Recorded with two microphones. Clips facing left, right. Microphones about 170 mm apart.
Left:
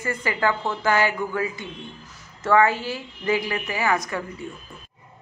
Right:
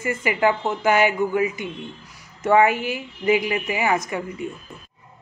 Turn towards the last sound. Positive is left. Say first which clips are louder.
# right 3 dB
turn(degrees=-15)  # may be behind; listen again after turning